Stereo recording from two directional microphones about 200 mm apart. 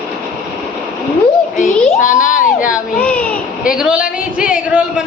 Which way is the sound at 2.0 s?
40° left (ahead or behind).